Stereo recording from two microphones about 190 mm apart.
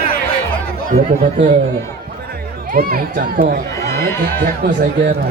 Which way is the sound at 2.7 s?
50° right (ahead or behind).